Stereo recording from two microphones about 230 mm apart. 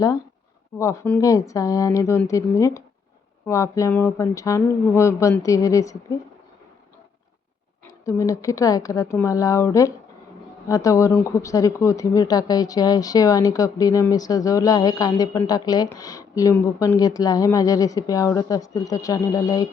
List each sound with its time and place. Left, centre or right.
0.8 s speech: centre
7.9 s speech: centre